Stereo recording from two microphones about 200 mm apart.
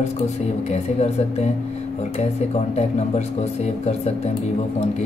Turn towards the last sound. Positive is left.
turn(degrees=35)  # may be behind; listen again after turning